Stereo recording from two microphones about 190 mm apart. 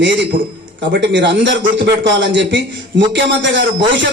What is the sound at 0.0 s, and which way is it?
A man's voice, 70° right (ahead or behind).